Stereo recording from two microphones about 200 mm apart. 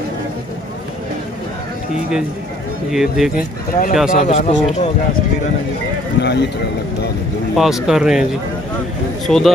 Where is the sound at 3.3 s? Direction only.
45° left (ahead or behind).